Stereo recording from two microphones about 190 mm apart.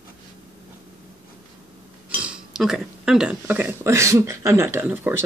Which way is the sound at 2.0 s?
5° right (ahead or behind).